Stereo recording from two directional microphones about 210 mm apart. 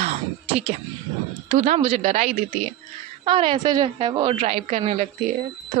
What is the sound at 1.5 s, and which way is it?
A woman's voice, 35° right (ahead or behind).